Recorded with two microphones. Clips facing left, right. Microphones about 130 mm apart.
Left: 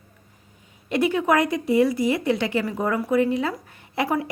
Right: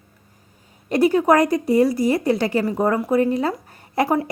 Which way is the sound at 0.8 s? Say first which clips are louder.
Right 5 dB; 40° right (ahead or behind).